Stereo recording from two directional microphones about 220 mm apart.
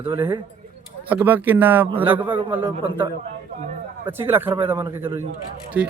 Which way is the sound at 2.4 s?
20° right (ahead or behind).